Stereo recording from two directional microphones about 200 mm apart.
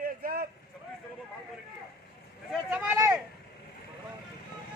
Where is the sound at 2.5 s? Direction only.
5° right (ahead or behind).